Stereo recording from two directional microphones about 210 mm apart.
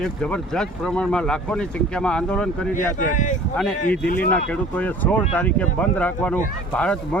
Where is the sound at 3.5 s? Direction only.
5° left (ahead or behind).